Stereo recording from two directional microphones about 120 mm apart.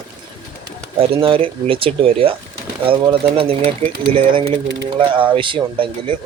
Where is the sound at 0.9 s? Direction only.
50° right (ahead or behind).